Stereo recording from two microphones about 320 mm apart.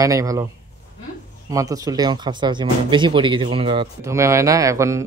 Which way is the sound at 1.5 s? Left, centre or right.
Centre.